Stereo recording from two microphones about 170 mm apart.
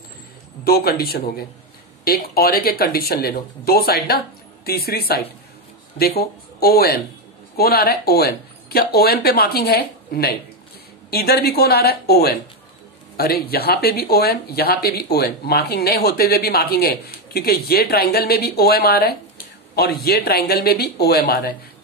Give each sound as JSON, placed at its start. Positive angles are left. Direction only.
{"t": 0.7, "sound": "speech", "side_deg": 65}